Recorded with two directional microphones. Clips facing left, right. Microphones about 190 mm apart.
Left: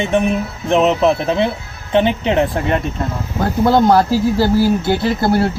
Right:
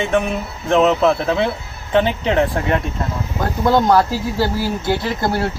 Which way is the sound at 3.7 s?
35° left (ahead or behind).